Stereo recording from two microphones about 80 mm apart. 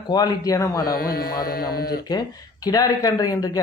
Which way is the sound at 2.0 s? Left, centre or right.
Left.